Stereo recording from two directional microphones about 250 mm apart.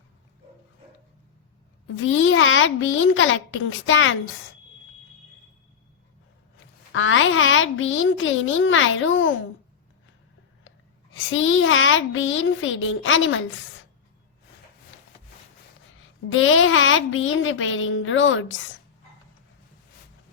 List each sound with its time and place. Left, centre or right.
2.0 s a woman's voice: left
6.9 s a woman's voice: left
11.1 s a woman's voice: left
16.0 s a woman's voice: left